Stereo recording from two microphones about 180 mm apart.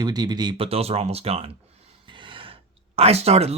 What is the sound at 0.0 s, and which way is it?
Speech, 20° right (ahead or behind).